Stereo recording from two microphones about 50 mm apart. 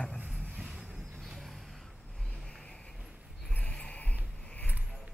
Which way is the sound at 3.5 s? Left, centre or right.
Left.